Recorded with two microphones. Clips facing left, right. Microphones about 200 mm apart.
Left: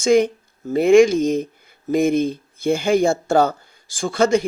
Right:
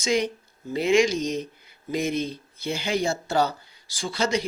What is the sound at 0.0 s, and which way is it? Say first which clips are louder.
Speech: left 9 dB; 50° left (ahead or behind).